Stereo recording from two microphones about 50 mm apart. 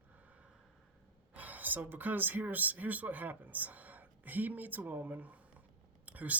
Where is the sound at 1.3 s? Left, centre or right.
Right.